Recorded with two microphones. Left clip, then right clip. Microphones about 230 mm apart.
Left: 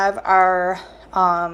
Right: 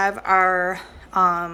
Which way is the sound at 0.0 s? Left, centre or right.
Right.